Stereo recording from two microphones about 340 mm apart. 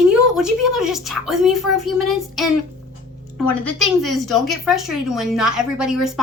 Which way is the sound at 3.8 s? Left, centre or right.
Centre.